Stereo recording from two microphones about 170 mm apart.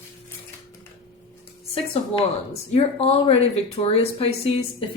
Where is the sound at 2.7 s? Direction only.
35° left (ahead or behind).